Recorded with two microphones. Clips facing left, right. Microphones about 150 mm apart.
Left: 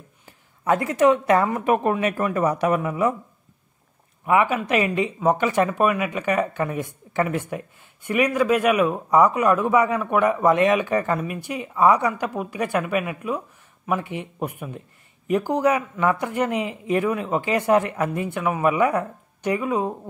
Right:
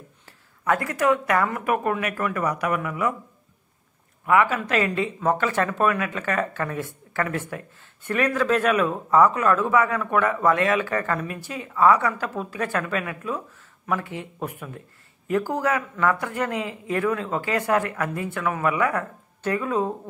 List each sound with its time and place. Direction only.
0.2 s speech: 20° left (ahead or behind)
4.3 s speech: 20° left (ahead or behind)